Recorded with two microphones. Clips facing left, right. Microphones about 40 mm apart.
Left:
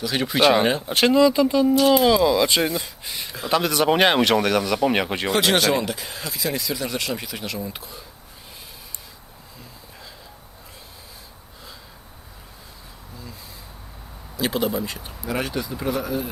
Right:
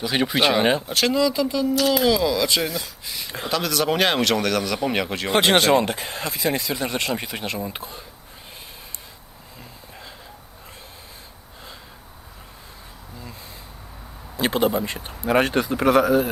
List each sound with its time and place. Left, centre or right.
0.0 s speech: centre
0.9 s speech: left
3.2 s speech: right
3.5 s speech: centre
5.3 s speech: right
14.3 s speech: right
15.9 s speech: right